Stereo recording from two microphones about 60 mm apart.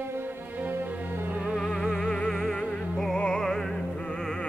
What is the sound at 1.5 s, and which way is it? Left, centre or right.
Music, centre.